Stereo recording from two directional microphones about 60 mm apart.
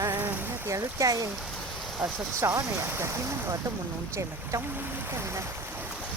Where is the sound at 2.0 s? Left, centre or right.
Right.